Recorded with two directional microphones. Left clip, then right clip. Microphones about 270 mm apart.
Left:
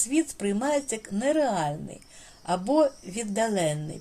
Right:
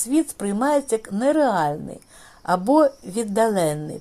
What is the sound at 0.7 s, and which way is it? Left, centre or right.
Speech, right.